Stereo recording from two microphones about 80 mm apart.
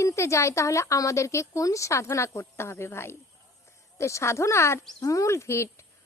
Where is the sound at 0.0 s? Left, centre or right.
Left.